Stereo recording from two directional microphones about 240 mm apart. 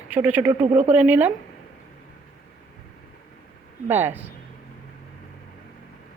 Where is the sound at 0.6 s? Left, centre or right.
Right.